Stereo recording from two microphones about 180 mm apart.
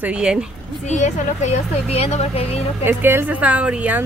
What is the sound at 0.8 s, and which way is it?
Speech, 40° left (ahead or behind).